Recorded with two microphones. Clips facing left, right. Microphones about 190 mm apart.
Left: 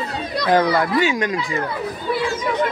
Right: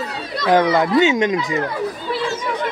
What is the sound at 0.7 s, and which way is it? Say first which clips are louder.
Speech: right 3 dB; 20° right (ahead or behind).